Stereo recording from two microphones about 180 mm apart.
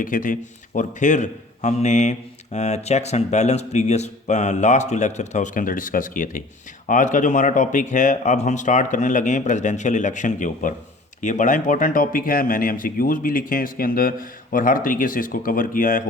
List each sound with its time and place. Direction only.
0.0 s a man's voice: 50° left (ahead or behind)